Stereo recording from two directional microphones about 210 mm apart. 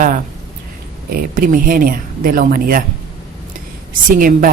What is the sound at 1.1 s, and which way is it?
Speech, 40° right (ahead or behind).